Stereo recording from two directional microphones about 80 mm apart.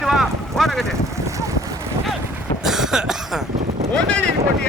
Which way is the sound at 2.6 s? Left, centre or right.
Centre.